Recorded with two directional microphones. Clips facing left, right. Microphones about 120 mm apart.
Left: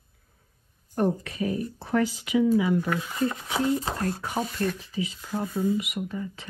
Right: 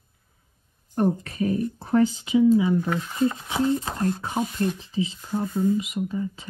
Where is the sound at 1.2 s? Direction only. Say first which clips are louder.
Right 4 dB; 40° right (ahead or behind).